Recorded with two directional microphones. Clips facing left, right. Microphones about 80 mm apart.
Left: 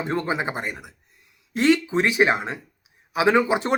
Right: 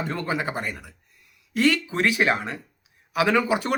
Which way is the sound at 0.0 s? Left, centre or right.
Left.